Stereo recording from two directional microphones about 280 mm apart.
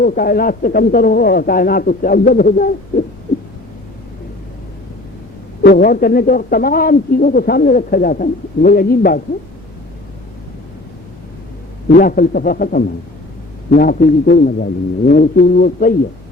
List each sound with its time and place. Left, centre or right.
0.0 s speech: left
5.6 s speech: left
11.9 s speech: left